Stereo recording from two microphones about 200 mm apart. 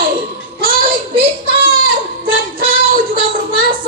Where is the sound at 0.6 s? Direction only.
45° right (ahead or behind).